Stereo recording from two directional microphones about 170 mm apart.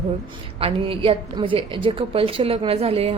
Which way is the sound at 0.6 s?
30° right (ahead or behind).